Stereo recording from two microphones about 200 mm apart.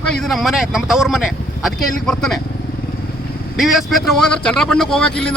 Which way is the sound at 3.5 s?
Centre (ahead or behind).